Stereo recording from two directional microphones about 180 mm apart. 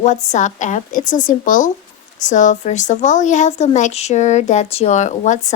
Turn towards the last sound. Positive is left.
turn(degrees=40)  # may be behind; listen again after turning